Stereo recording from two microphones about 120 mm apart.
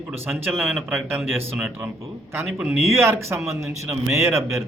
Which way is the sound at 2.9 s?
20° right (ahead or behind).